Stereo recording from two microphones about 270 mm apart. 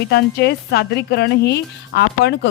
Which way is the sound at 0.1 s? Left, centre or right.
Left.